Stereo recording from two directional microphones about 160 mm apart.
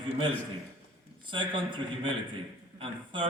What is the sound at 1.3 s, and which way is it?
A man's voice, 30° right (ahead or behind).